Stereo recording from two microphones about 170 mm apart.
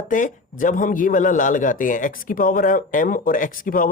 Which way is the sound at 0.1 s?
50° left (ahead or behind).